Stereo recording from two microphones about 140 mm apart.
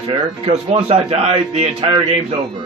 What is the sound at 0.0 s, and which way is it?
A man's voice, 40° right (ahead or behind).